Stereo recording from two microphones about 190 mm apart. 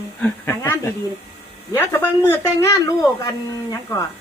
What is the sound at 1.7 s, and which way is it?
Speech, 15° left (ahead or behind).